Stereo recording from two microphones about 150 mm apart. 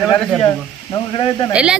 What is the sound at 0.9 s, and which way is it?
Speech, 30° left (ahead or behind).